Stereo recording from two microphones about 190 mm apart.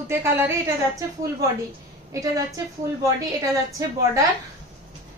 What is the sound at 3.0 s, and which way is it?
A woman's voice, 15° right (ahead or behind).